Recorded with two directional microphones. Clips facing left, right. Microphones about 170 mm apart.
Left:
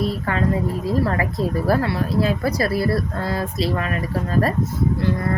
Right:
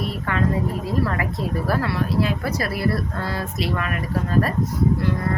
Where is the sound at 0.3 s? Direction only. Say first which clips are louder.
Right 2 dB; 35° left (ahead or behind).